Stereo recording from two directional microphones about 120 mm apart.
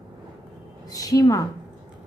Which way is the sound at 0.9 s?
30° left (ahead or behind).